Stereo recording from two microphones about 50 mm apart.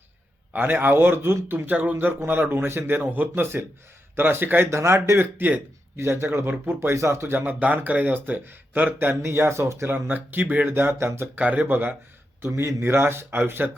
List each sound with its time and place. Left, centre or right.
0.5 s speech: right
2.9 s speech: right
4.7 s speech: right
5.1 s speech: right
6.0 s speech: right
7.6 s speech: right
9.2 s speech: right
9.8 s speech: right
10.7 s speech: right
11.3 s speech: right
12.5 s speech: right
13.6 s speech: right